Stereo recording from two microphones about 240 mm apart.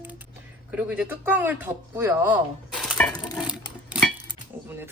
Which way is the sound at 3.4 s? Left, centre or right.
Centre.